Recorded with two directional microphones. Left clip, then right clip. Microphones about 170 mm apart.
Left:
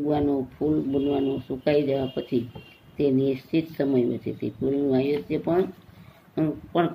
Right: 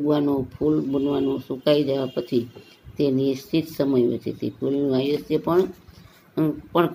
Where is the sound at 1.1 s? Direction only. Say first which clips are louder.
Right 2 dB; 30° right (ahead or behind).